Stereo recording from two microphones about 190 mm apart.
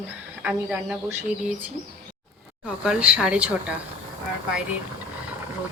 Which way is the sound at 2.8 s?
5° right (ahead or behind).